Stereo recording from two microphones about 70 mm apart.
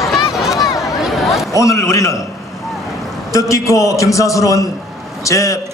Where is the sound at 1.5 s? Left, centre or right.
Left.